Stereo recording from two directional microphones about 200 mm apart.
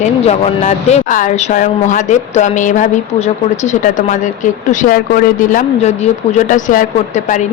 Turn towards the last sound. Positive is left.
turn(degrees=40)  # may be behind; listen again after turning